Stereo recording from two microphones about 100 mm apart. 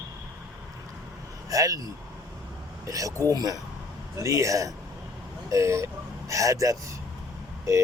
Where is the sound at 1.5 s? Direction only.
35° right (ahead or behind).